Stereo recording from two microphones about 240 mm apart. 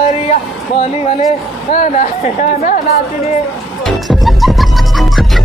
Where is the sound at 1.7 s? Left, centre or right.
Left.